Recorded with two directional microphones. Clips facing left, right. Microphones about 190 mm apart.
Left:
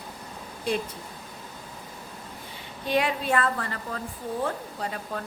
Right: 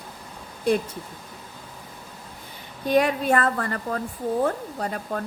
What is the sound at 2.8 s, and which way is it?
Speech, 45° right (ahead or behind).